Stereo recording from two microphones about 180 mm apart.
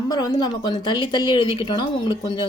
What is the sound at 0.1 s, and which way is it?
Speech, 20° left (ahead or behind).